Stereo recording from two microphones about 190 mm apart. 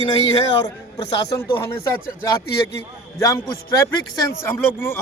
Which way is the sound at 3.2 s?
15° left (ahead or behind).